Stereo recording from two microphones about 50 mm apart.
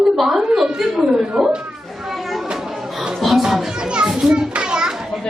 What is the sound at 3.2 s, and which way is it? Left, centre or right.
Music, centre.